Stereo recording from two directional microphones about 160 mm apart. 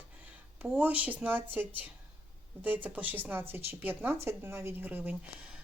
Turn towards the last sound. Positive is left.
turn(degrees=-10)  # may be behind; listen again after turning